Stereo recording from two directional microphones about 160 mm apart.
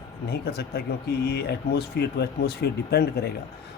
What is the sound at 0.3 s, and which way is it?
A man's voice, 85° left.